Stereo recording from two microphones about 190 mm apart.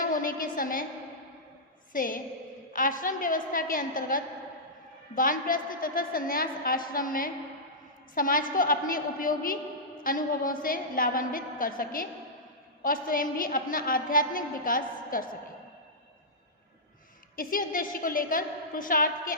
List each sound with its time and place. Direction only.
0.0 s a woman's voice: 45° left (ahead or behind)
1.9 s a woman's voice: 45° left (ahead or behind)
17.3 s a woman's voice: 45° left (ahead or behind)